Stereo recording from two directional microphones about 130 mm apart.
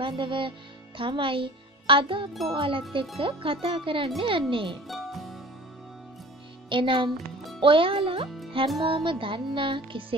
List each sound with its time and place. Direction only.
0.0 s a child's voice: 40° right (ahead or behind)
2.5 s music: 40° right (ahead or behind)
3.2 s speech: 45° right (ahead or behind)
4.2 s music: 40° right (ahead or behind)
4.8 s music: centre (ahead or behind)
6.7 s music: 40° right (ahead or behind)
7.6 s speech: 40° right (ahead or behind)
8.8 s music: 40° right (ahead or behind)